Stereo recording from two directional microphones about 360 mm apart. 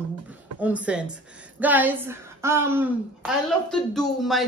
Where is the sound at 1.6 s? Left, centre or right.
Centre.